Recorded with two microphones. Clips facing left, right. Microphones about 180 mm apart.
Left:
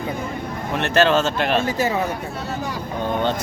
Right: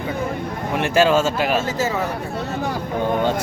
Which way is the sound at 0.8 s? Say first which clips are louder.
Right 1 dB; 10° right (ahead or behind).